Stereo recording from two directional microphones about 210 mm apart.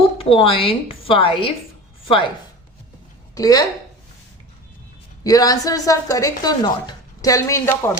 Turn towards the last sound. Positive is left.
turn(degrees=15)  # may be behind; listen again after turning